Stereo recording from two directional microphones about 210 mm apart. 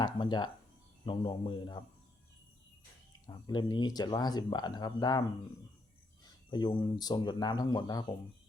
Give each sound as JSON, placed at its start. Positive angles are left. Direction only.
{"t": 0.0, "sound": "speech", "side_deg": 20}
{"t": 3.2, "sound": "speech", "side_deg": 20}
{"t": 6.2, "sound": "speech", "side_deg": 20}